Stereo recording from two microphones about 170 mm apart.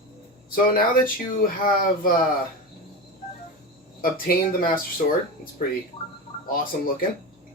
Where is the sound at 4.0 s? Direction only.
55° left (ahead or behind).